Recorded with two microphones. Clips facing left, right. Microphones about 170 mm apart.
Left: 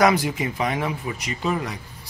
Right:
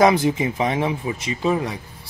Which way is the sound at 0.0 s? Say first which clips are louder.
Right 3 dB; 25° right (ahead or behind).